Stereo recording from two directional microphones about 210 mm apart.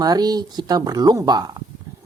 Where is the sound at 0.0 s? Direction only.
20° right (ahead or behind).